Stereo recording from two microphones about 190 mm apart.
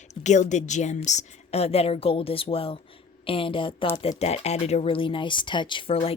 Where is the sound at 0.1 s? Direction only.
40° left (ahead or behind).